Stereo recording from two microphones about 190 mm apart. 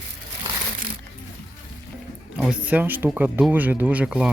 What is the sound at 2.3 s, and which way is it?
Speech, 5° right (ahead or behind).